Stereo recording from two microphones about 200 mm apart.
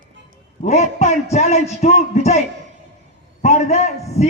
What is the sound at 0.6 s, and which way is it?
A man's voice, 35° left (ahead or behind).